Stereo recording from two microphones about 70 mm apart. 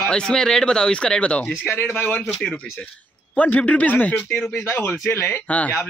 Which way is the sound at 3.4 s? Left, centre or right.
Left.